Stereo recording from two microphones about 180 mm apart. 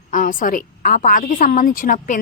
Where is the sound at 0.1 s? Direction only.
45° left (ahead or behind).